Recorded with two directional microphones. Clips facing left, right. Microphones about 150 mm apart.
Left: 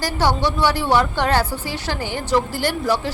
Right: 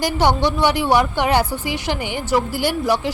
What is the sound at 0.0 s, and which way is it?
A woman's voice, 15° right (ahead or behind).